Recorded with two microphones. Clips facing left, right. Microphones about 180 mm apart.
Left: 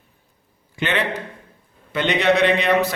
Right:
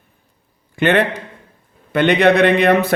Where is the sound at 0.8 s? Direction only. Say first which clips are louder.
Right 8 dB; 55° right (ahead or behind).